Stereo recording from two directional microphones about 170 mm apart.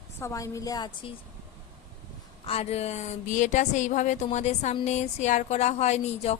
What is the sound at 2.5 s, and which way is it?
Speech, 35° left (ahead or behind).